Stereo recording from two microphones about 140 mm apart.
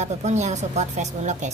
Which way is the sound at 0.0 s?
55° right (ahead or behind).